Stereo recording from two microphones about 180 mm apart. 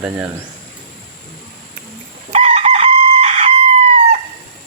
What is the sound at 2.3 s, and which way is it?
Chicken, 35° right (ahead or behind).